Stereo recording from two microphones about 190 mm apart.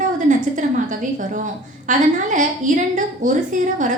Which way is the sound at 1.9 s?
40° right (ahead or behind).